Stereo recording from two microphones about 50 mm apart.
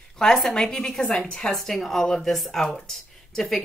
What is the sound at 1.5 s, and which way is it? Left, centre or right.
Speech, centre.